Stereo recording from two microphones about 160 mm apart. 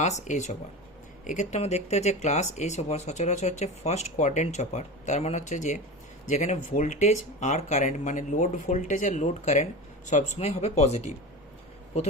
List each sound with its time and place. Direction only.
0.0 s speech: 45° left (ahead or behind)